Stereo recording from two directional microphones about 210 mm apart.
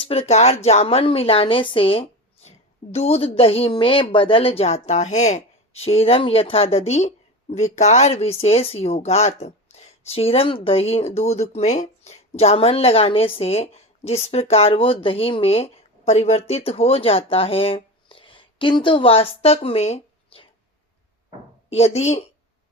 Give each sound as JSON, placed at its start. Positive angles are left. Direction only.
{"t": 0.0, "sound": "speech", "side_deg": 30}
{"t": 21.7, "sound": "speech", "side_deg": 30}